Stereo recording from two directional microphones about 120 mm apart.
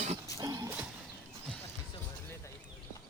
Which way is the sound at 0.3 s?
30° right (ahead or behind).